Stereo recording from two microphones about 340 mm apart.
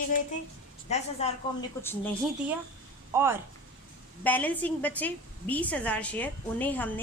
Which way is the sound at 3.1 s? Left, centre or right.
Centre.